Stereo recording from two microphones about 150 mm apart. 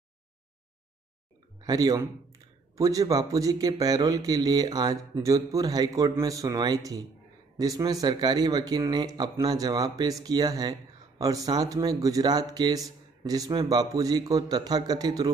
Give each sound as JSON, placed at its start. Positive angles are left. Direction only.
{"t": 1.6, "sound": "speech", "side_deg": -25}